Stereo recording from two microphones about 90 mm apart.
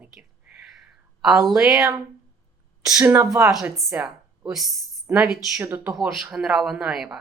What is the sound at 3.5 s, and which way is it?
A woman's voice, 5° right (ahead or behind).